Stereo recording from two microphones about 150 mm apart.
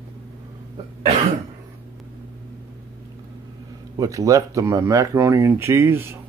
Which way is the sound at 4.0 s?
20° right (ahead or behind).